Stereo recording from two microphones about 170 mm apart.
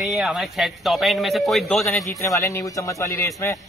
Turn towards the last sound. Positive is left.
turn(degrees=15)  # may be behind; listen again after turning